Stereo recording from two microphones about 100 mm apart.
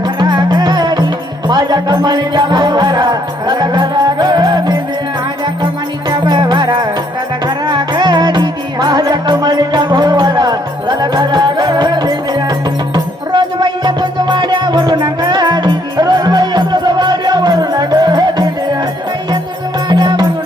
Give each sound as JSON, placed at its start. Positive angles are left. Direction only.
{"t": 0.0, "sound": "music", "side_deg": -45}
{"t": 6.1, "sound": "music", "side_deg": -45}
{"t": 19.9, "sound": "music", "side_deg": -45}